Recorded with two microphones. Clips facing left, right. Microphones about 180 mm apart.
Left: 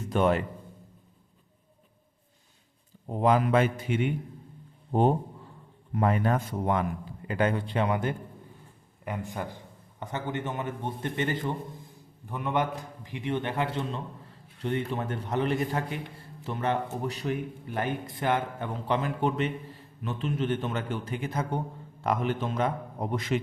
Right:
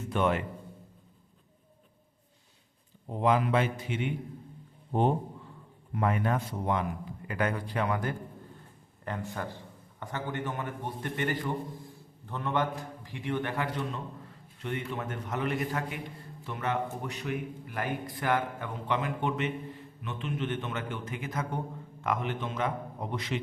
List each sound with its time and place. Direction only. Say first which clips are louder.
0.1 s a man's voice: left 4 dB; 40° left (ahead or behind)
3.2 s a man's voice: left 3 dB; 40° left (ahead or behind)
4.9 s a man's voice: left 3 dB; 35° left (ahead or behind)
7.3 s a man's voice: left 4 dB; 25° left (ahead or behind); by 23.4 s 45° left (ahead or behind)